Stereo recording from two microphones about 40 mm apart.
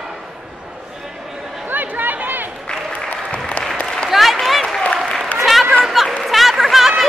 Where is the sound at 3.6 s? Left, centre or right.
Left.